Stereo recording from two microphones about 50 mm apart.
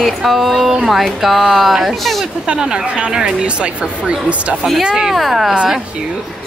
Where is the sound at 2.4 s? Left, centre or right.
Centre.